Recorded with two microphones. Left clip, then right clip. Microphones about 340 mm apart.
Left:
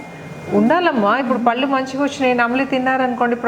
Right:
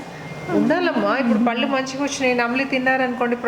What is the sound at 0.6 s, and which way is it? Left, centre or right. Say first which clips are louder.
A woman's voice: left 5 dB; left.